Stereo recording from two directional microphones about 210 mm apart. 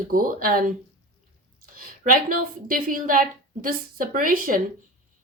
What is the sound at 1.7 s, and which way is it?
A woman's voice, 40° right (ahead or behind).